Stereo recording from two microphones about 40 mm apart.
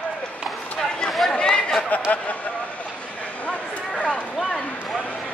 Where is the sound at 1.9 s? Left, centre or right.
Left.